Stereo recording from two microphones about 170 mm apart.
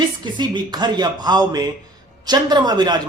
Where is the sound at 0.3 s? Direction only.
25° right (ahead or behind).